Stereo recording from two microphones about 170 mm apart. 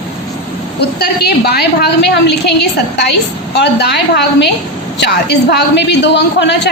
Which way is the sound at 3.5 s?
80° left.